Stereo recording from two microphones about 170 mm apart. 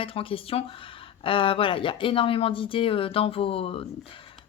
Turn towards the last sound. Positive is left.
turn(degrees=35)  # may be behind; listen again after turning